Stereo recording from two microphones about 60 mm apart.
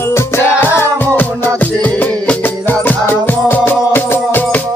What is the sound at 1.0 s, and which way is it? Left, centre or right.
Music, left.